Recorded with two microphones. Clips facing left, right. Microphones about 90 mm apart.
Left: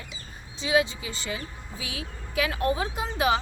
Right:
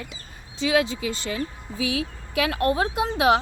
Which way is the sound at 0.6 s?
70° right (ahead or behind).